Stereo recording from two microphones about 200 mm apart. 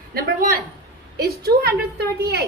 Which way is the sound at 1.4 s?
50° right (ahead or behind).